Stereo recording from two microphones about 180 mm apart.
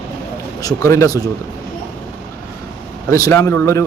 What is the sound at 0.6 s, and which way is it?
Speech, 20° left (ahead or behind).